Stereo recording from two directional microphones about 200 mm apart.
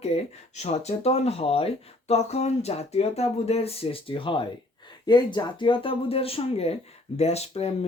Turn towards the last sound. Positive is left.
turn(degrees=30)  # may be behind; listen again after turning